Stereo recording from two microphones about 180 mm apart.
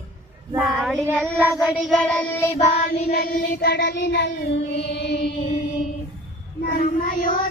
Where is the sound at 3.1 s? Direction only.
60° left (ahead or behind).